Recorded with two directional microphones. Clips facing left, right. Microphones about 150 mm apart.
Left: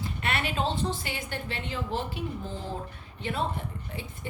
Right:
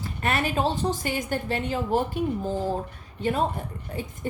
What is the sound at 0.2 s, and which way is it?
A woman's voice, 45° right (ahead or behind).